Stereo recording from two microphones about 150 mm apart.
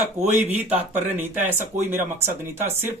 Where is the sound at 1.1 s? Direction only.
10° right (ahead or behind).